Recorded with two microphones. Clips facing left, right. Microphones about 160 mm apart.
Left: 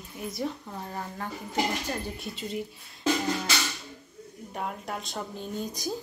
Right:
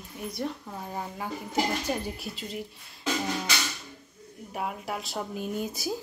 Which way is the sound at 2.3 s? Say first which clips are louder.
Left 3 dB; centre (ahead or behind).